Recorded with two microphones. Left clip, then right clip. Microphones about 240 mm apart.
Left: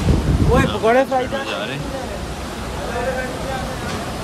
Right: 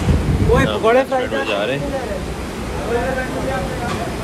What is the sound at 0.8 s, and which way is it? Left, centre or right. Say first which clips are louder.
Speech: right 1 dB; left.